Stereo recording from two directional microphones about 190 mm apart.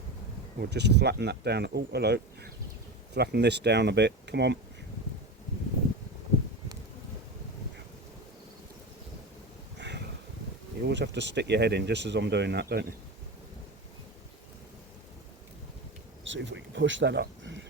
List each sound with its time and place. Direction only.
0.6 s speech: 60° right (ahead or behind)
9.7 s a sound: 65° right (ahead or behind)
10.8 s speech: 65° right (ahead or behind)
16.2 s speech: 75° right (ahead or behind)